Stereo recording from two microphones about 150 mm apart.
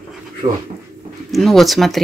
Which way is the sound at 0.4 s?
35° right (ahead or behind).